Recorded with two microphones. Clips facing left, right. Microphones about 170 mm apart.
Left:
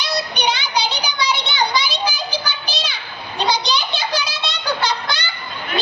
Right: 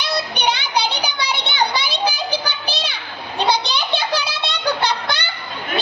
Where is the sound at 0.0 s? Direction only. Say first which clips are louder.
Even; 60° right (ahead or behind).